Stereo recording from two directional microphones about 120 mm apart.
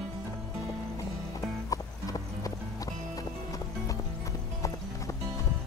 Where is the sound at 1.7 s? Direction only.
30° left (ahead or behind).